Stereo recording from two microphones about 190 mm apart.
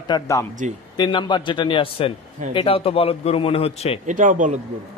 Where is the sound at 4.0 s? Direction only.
40° right (ahead or behind).